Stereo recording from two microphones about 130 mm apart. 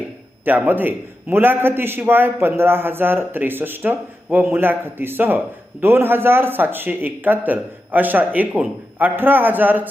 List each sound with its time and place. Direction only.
0.4 s a man's voice: 15° right (ahead or behind)